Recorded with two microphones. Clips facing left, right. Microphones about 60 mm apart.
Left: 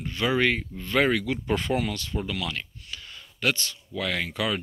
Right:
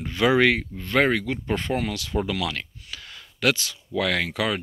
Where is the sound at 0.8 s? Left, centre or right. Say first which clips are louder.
Right 2 dB; right.